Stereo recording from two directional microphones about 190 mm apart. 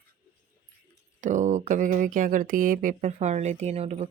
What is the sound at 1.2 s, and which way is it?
Speech, 40° right (ahead or behind).